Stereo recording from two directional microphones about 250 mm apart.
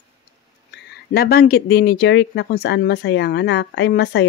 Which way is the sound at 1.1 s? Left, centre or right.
Left.